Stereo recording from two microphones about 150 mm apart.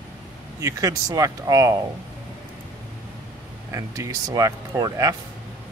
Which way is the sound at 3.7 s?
20° right (ahead or behind).